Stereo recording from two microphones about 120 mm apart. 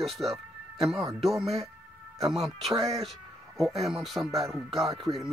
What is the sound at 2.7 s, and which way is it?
Speech, 30° right (ahead or behind).